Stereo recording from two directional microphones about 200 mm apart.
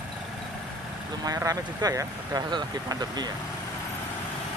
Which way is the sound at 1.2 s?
15° right (ahead or behind).